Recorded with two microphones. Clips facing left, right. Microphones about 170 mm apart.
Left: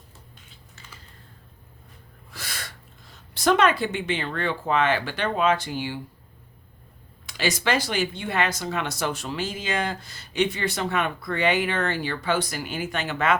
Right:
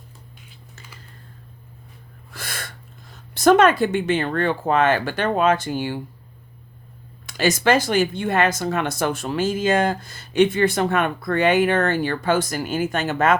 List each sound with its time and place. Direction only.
2.3 s sneeze: 50° right (ahead or behind)
3.3 s speech: 50° right (ahead or behind)
7.3 s speech: 45° right (ahead or behind)